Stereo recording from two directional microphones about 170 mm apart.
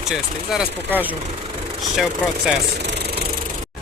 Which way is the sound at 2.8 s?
75° right (ahead or behind).